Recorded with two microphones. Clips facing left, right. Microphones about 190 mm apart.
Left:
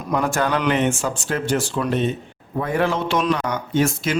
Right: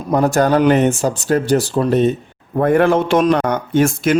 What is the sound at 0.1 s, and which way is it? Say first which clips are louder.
Speech: right 7 dB; 40° right (ahead or behind).